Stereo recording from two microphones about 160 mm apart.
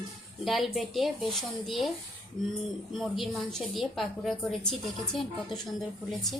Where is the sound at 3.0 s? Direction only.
Centre (ahead or behind).